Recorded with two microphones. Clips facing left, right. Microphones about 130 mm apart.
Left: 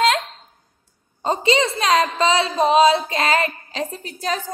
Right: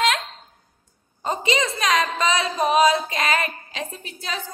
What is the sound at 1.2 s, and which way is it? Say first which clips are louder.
A woman's voice: left 4 dB; 30° left (ahead or behind).